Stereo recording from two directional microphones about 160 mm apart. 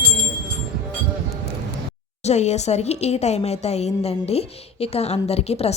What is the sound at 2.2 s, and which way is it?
Speech, 45° left (ahead or behind).